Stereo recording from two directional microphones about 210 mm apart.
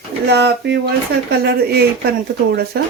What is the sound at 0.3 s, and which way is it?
Speech, 50° right (ahead or behind).